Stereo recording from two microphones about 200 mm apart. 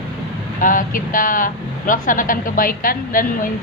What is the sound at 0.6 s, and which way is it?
Speech, 40° left (ahead or behind).